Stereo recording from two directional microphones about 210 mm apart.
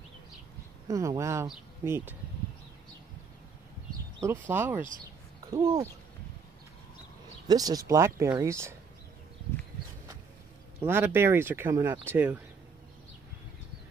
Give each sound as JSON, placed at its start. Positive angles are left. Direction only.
{"t": 0.8, "sound": "speech", "side_deg": -15}
{"t": 4.5, "sound": "speech", "side_deg": -10}
{"t": 7.4, "sound": "speech", "side_deg": -20}
{"t": 10.8, "sound": "speech", "side_deg": -10}